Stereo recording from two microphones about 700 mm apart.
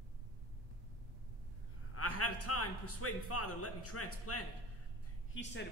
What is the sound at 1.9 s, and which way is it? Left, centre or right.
A man's voice, centre.